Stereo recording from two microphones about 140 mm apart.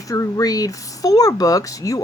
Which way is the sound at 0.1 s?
25° left (ahead or behind).